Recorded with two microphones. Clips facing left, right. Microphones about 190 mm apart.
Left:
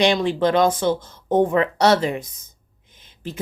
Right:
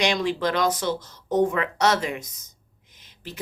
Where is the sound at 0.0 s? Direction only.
30° left (ahead or behind).